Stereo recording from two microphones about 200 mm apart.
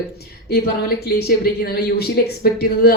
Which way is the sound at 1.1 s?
50° left (ahead or behind).